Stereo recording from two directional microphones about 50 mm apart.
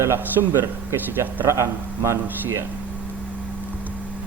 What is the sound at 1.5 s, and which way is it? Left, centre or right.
A man's voice, right.